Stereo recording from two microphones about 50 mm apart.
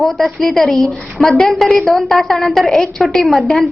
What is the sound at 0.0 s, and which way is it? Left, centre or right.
A woman's voice, centre.